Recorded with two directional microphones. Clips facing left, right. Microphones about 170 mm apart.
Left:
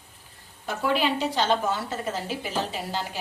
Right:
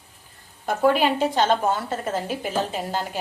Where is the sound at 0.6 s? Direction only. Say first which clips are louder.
Right 6 dB; 50° right (ahead or behind).